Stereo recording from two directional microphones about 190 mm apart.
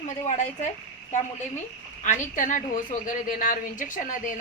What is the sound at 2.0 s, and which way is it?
A woman's voice, 40° left (ahead or behind).